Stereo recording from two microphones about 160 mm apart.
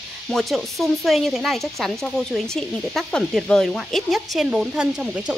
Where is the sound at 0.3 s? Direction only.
Centre (ahead or behind).